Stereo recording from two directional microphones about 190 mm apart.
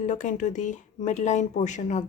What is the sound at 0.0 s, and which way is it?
Speech, 40° left (ahead or behind).